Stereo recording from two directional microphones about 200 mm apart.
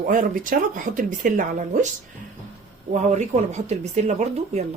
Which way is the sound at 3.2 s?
35° right (ahead or behind).